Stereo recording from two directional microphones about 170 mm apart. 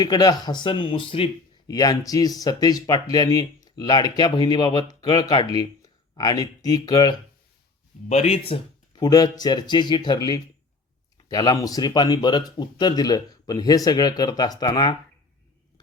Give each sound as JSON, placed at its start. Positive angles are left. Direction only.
{"t": 0.0, "sound": "speech", "side_deg": 25}
{"t": 8.1, "sound": "speech", "side_deg": 40}
{"t": 9.0, "sound": "speech", "side_deg": 20}